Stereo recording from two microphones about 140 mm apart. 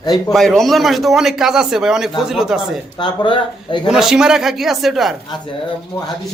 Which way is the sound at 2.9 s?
35° left (ahead or behind).